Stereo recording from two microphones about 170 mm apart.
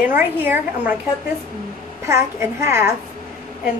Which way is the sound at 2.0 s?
15° right (ahead or behind).